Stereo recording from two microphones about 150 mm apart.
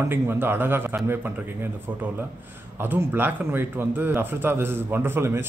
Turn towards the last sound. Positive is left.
turn(degrees=-15)  # may be behind; listen again after turning